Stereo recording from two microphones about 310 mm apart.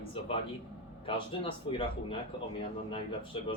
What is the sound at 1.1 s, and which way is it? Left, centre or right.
Speech, centre.